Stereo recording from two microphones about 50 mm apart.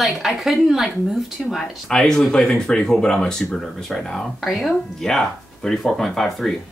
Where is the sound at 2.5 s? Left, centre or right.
Centre.